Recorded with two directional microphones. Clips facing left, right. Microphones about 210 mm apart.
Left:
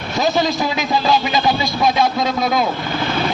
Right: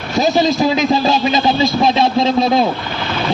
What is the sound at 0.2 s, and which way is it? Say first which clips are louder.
A man's voice: right 4 dB; 20° right (ahead or behind).